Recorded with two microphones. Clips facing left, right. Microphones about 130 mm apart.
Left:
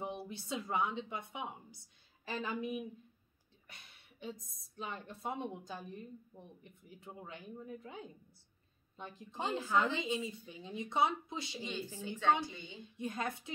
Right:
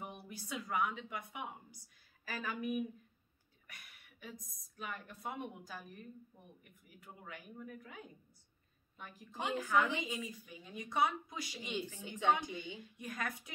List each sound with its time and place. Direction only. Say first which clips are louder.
0.0 s a woman's voice: left 6 dB; 25° left (ahead or behind)
12.0 s a woman's voice: left 2 dB; 15° right (ahead or behind)
12.7 s a woman's voice: left 4 dB; 25° left (ahead or behind)